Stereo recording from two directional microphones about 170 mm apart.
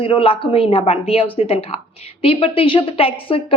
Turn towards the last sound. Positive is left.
turn(degrees=35)  # may be behind; listen again after turning